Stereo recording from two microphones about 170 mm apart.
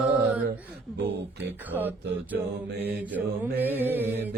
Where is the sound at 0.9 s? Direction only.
75° right (ahead or behind).